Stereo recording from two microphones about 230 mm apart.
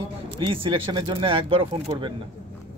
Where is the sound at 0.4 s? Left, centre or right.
Right.